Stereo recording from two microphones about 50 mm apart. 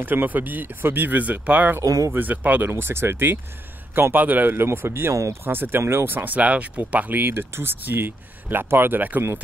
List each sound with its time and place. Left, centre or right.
0.0 s speech: right
1.8 s speech: right
2.1 s speech: right
2.7 s speech: right
4.1 s speech: right
5.4 s speech: right